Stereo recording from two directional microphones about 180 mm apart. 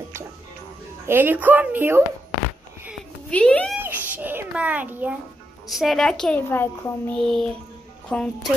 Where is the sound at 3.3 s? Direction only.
5° left (ahead or behind).